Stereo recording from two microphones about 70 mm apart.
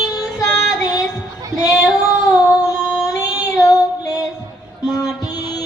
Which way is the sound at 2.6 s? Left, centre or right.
Left.